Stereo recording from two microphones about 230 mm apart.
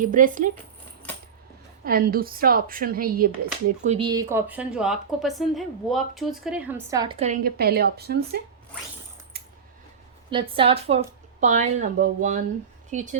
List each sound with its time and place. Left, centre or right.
0.0 s speech: right
1.8 s speech: right
3.8 s a woman's voice: right
7.2 s speech: right
10.2 s a woman's voice: right